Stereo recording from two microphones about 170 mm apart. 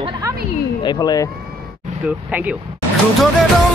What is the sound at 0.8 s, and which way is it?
Speech, 25° left (ahead or behind).